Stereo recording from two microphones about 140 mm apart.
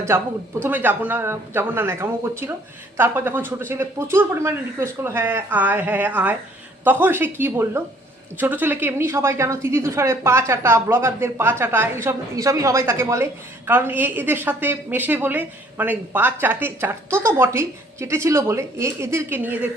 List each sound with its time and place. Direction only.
0.1 s a woman's voice: 15° right (ahead or behind)